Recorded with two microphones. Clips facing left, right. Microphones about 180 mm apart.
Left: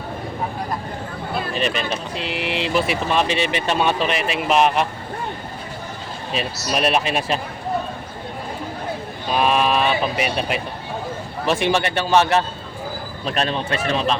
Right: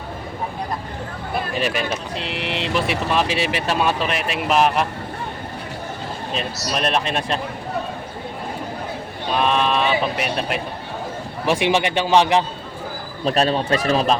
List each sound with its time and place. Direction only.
1.5 s a man's voice: 10° right (ahead or behind)
2.1 s speech: centre (ahead or behind)
6.3 s speech: 5° left (ahead or behind)
9.3 s speech: 5° left (ahead or behind)
11.4 s a man's voice: 15° right (ahead or behind)
13.2 s speech: 35° right (ahead or behind)